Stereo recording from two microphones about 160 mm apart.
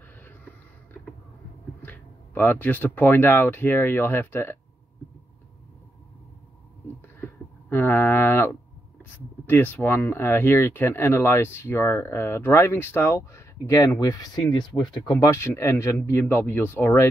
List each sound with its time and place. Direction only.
1.8 s speech: 10° left (ahead or behind)
7.7 s speech: 10° left (ahead or behind)